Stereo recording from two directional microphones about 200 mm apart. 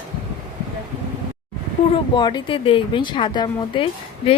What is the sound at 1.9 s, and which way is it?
Speech, 20° left (ahead or behind).